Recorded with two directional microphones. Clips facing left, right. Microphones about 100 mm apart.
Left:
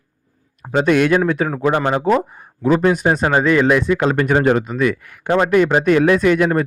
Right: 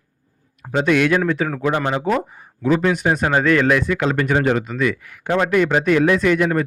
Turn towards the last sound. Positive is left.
turn(degrees=40)  # may be behind; listen again after turning